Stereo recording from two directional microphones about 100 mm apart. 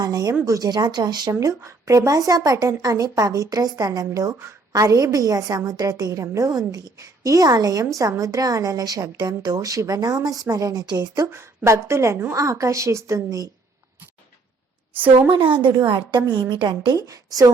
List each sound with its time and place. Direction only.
0.0 s a woman's voice: 40° right (ahead or behind)
1.3 s a woman's voice: 35° right (ahead or behind)
11.3 s a woman's voice: 25° right (ahead or behind)
15.3 s a woman's voice: 55° right (ahead or behind)